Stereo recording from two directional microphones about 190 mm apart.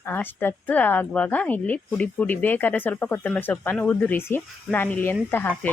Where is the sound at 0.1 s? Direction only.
10° left (ahead or behind).